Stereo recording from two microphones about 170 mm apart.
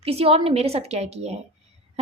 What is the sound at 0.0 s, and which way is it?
A woman's voice, 35° right (ahead or behind).